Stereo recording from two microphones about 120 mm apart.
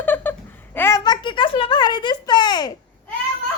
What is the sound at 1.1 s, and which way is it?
Speech, 40° left (ahead or behind).